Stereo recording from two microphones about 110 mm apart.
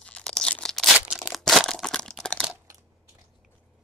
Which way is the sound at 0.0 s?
10° left (ahead or behind).